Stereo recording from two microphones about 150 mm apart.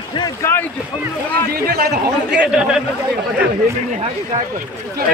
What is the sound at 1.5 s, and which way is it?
Speech, 90° right.